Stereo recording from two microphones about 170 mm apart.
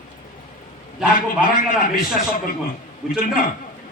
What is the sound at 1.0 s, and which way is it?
A man's voice, 55° left (ahead or behind).